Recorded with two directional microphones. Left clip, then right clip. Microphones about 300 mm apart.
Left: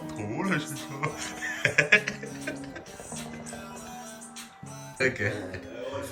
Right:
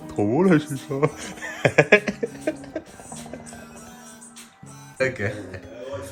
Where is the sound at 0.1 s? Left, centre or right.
Centre.